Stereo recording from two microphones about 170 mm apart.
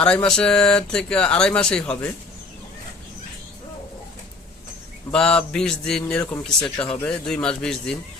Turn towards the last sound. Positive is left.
turn(degrees=5)  # may be behind; listen again after turning